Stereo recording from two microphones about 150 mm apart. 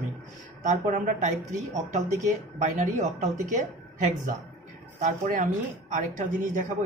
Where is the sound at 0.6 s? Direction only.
55° right (ahead or behind).